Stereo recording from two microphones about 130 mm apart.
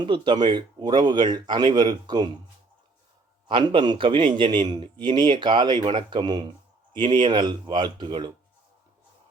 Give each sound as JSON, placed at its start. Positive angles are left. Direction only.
{"t": 0.0, "sound": "speech", "side_deg": -35}
{"t": 3.5, "sound": "speech", "side_deg": -40}